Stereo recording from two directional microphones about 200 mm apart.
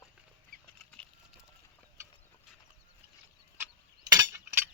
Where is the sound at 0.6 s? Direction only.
5° left (ahead or behind).